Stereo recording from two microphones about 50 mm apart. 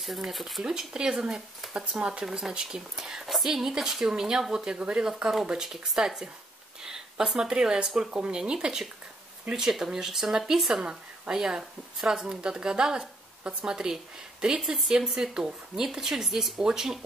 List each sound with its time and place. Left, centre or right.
0.3 s speech: centre
0.7 s speech: centre
2.2 s speech: centre
8.1 s speech: right
14.6 s speech: centre